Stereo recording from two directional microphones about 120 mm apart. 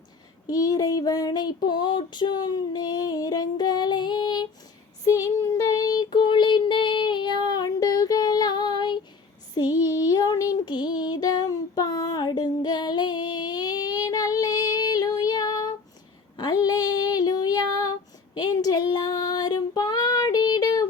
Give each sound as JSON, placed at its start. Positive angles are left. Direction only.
{"t": 0.4, "sound": "child singing", "side_deg": 30}